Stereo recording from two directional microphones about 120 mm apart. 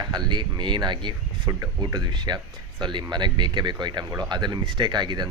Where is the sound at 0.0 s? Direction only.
35° right (ahead or behind).